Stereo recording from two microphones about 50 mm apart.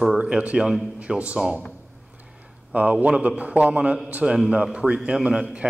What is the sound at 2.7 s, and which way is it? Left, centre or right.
A man's voice, right.